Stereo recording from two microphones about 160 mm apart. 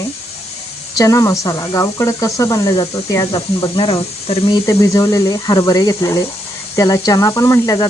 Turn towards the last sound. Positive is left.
turn(degrees=20)  # may be behind; listen again after turning